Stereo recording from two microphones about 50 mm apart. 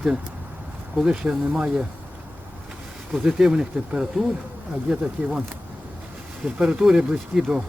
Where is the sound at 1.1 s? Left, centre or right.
Right.